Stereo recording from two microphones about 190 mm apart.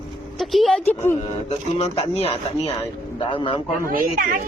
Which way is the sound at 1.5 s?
30° left (ahead or behind).